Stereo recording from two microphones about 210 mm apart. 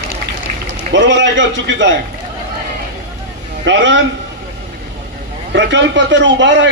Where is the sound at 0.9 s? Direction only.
60° right (ahead or behind).